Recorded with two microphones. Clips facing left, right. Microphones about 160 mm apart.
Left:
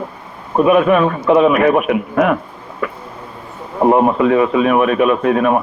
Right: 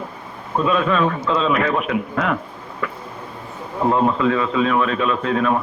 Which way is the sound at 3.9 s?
20° left (ahead or behind).